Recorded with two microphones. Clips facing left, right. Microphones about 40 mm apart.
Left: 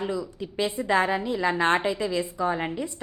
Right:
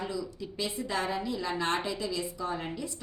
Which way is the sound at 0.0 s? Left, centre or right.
Left.